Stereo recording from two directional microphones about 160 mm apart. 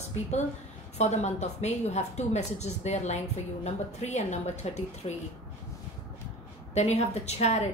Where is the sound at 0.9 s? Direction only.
45° left (ahead or behind).